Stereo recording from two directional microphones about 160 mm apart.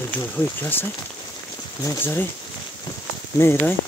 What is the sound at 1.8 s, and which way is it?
Speech, 15° left (ahead or behind).